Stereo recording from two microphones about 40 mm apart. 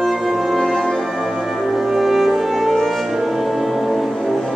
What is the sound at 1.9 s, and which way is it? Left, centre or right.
Music, centre.